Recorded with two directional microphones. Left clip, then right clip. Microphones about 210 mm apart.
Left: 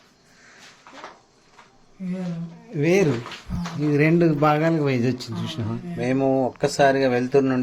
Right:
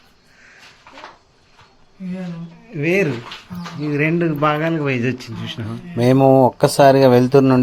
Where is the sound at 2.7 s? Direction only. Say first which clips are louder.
Right 2 dB; 10° left (ahead or behind).